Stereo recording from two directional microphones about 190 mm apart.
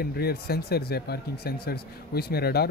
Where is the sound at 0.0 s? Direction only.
55° left (ahead or behind).